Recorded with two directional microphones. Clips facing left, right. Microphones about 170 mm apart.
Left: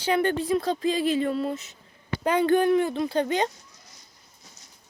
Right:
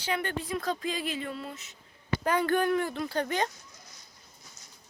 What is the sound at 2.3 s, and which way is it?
Speech, 20° left (ahead or behind).